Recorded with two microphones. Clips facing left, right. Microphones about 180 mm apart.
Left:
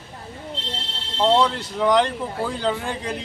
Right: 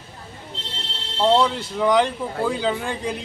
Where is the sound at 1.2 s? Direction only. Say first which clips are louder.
Even; centre (ahead or behind).